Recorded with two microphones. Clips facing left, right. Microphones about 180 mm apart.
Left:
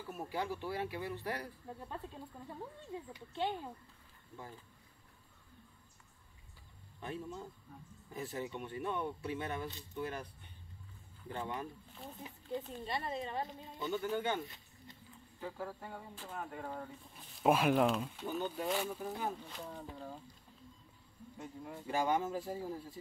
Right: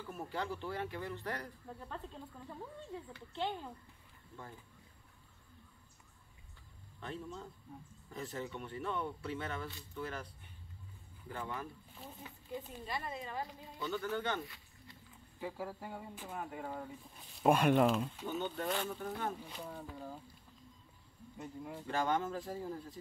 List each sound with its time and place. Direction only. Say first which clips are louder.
0.0 s speech: left 1 dB; 10° left (ahead or behind)
7.0 s speech: left 1 dB; 15° left (ahead or behind)
11.2 s speech: left 2 dB; 20° left (ahead or behind)
15.4 s speech: right 1 dB; 10° right (ahead or behind)
21.8 s speech: left 1 dB; 10° left (ahead or behind)